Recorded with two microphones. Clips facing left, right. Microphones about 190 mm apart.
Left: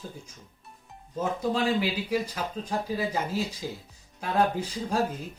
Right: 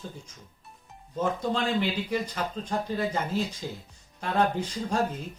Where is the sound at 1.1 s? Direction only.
5° left (ahead or behind).